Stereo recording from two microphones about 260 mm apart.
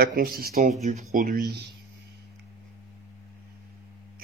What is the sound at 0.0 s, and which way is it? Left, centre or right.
Speech, right.